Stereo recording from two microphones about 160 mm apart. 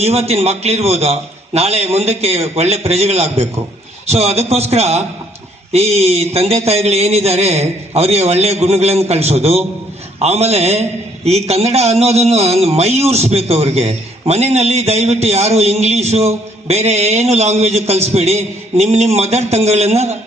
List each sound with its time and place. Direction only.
0.0 s a man's voice: 40° right (ahead or behind)